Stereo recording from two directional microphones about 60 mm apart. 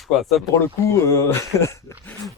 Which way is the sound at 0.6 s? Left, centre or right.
Left.